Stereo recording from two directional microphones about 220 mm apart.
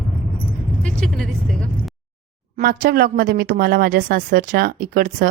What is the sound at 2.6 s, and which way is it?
A woman's voice, 45° right (ahead or behind).